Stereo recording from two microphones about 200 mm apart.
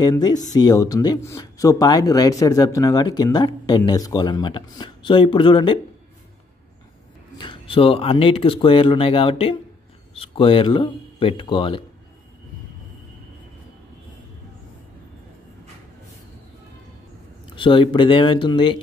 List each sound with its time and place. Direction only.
0.0 s speech: 20° left (ahead or behind)
7.3 s speech: 25° left (ahead or behind)
17.6 s speech: 25° left (ahead or behind)